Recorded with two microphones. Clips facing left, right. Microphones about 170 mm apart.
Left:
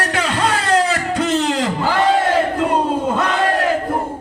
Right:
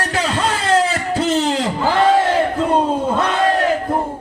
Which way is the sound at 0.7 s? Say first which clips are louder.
Right 3 dB; 30° right (ahead or behind).